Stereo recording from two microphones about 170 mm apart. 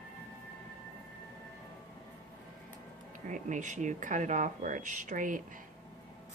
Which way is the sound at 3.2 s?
45° right (ahead or behind).